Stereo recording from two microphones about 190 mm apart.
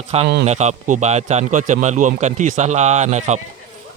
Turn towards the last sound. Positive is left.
turn(degrees=-35)  # may be behind; listen again after turning